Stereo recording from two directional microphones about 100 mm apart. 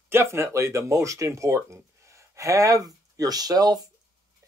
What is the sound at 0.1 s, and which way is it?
Speech, 25° right (ahead or behind).